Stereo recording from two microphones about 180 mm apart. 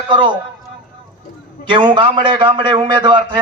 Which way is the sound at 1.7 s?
25° right (ahead or behind).